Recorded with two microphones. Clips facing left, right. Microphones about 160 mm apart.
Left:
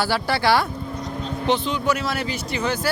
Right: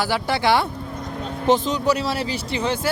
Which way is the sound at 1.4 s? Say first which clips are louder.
Right 3 dB; 40° right (ahead or behind).